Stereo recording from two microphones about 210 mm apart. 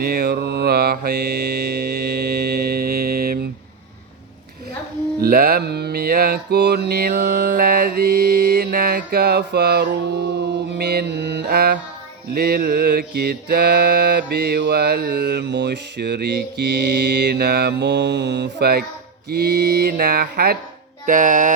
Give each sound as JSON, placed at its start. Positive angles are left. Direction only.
{"t": 0.0, "sound": "mantra", "side_deg": -50}
{"t": 5.2, "sound": "mantra", "side_deg": -45}
{"t": 21.1, "sound": "music", "side_deg": -40}